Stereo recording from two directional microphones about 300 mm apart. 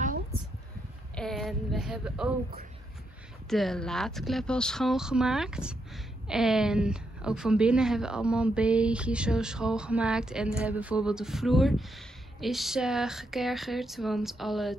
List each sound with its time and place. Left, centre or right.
0.0 s a sound: right
1.1 s speech: centre
3.4 s speech: centre